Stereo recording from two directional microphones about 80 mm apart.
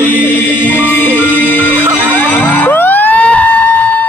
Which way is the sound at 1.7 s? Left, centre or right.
Right.